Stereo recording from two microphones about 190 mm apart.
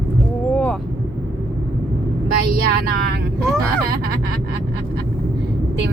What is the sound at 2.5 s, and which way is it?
Speech, 50° right (ahead or behind).